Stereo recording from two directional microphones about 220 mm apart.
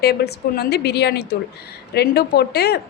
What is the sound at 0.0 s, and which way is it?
A woman's voice, 45° left (ahead or behind).